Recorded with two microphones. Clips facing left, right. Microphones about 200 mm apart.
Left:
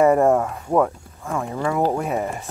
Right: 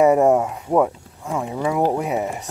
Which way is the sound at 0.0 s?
10° right (ahead or behind).